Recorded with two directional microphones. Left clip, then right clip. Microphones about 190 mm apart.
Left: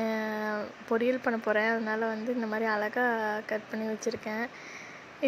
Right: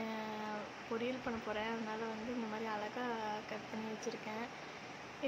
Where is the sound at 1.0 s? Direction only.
40° left (ahead or behind).